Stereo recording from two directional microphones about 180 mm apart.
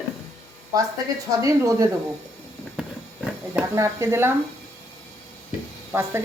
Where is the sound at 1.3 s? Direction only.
20° right (ahead or behind).